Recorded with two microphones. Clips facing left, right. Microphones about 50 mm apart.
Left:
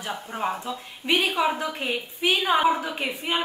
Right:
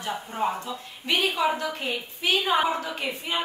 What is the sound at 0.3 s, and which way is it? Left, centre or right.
A woman's voice, centre.